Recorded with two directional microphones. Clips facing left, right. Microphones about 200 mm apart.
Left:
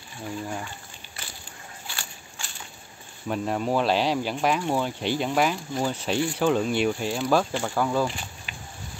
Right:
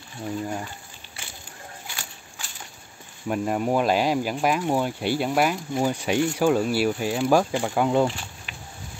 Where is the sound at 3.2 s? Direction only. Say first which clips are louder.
Right 2 dB; 10° right (ahead or behind).